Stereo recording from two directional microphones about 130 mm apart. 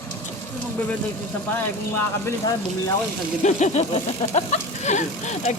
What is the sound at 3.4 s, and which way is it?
Speech, 65° left (ahead or behind).